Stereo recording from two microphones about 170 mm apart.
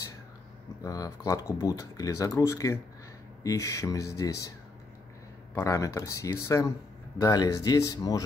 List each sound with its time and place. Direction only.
0.8 s speech: 20° left (ahead or behind)
5.5 s speech: 15° left (ahead or behind)